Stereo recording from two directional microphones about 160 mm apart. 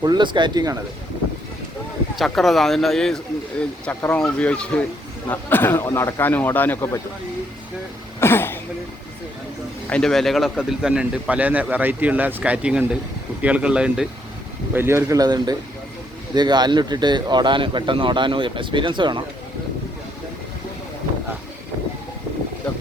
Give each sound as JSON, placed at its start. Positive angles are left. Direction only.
{"t": 0.0, "sound": "speech", "side_deg": -30}
{"t": 2.1, "sound": "speech", "side_deg": 0}
{"t": 8.2, "sound": "speech", "side_deg": 15}
{"t": 9.8, "sound": "a man's voice", "side_deg": 5}